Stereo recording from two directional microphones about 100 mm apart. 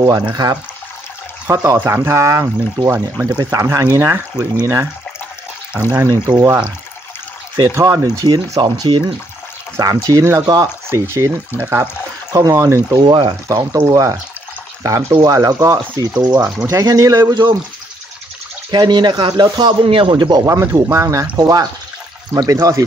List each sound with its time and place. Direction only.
0.0 s speech: 40° right (ahead or behind)
1.5 s speech: 30° right (ahead or behind)
5.9 s speech: 25° right (ahead or behind)
8.3 s a man's voice: 45° right (ahead or behind)
9.8 s speech: 35° right (ahead or behind); by 11.9 s 15° right (ahead or behind)
12.3 s speech: 35° right (ahead or behind)
13.0 s a man's voice: 50° right (ahead or behind)
13.8 s speech: 15° left (ahead or behind)
14.8 s speech: 30° right (ahead or behind)
17.3 s a man's voice: 50° right (ahead or behind)
18.7 s a man's voice: 50° right (ahead or behind)
20.4 s speech: 30° right (ahead or behind)